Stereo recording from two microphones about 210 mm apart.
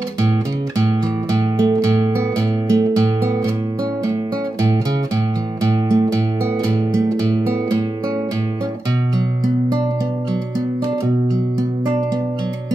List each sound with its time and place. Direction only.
1.3 s music: 15° right (ahead or behind)
5.7 s music: 15° right (ahead or behind)